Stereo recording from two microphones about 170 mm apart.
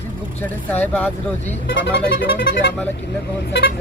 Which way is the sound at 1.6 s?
90° left.